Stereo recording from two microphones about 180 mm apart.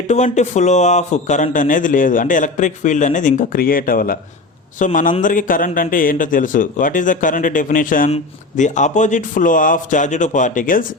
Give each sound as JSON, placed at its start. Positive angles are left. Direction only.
{"t": 0.1, "sound": "a man's voice", "side_deg": 40}